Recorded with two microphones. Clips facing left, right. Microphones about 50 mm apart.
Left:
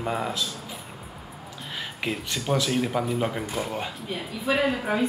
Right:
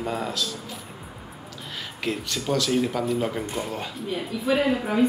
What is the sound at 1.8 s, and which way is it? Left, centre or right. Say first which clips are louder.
Speech: right 1 dB; centre.